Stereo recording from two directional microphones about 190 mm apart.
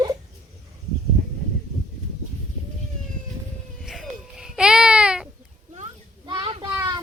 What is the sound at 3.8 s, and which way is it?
Baby cry, centre (ahead or behind).